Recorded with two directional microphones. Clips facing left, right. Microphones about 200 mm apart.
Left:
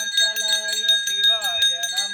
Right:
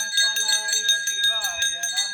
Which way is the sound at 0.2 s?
60° left (ahead or behind).